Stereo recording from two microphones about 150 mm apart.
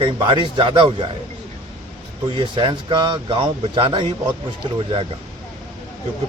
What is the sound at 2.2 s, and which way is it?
Speech, 35° right (ahead or behind).